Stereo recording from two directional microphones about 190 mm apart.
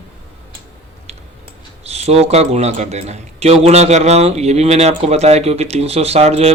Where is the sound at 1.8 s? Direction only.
35° right (ahead or behind).